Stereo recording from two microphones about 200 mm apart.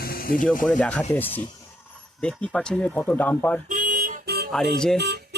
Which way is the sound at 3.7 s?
45° right (ahead or behind).